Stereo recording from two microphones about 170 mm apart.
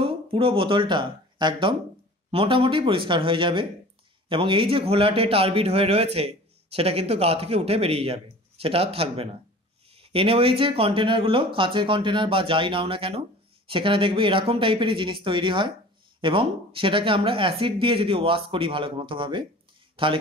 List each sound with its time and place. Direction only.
0.0 s speech: 30° right (ahead or behind)